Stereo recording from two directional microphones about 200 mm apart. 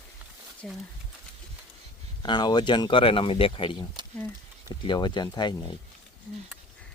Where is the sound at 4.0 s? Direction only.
20° right (ahead or behind).